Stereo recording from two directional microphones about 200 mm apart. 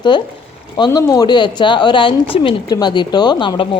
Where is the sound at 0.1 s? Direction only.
20° left (ahead or behind).